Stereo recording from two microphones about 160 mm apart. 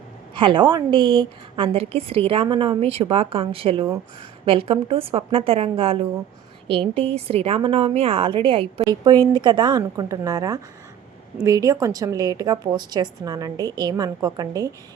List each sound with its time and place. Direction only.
0.3 s a woman's voice: 30° right (ahead or behind)